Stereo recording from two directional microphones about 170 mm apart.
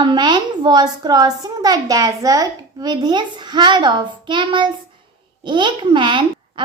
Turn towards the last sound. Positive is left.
turn(degrees=-30)  # may be behind; listen again after turning